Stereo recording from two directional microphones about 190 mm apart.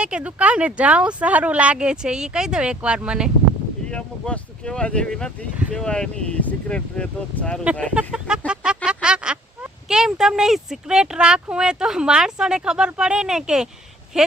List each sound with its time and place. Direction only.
0.0 s speech: 5° right (ahead or behind)